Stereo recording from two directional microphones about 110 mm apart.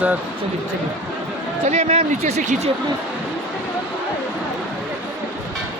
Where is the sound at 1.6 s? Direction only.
90° right.